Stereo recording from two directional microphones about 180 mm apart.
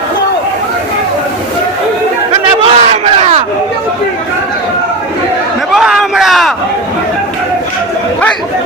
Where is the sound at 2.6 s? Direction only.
35° right (ahead or behind).